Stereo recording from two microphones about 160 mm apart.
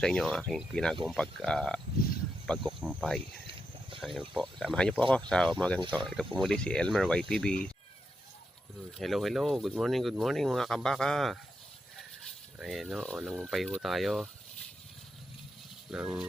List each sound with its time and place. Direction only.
0.0 s speech: 5° left (ahead or behind)
3.4 s a sound: 30° right (ahead or behind)
4.0 s speech: centre (ahead or behind)
9.0 s speech: centre (ahead or behind)
15.9 s speech: 5° right (ahead or behind)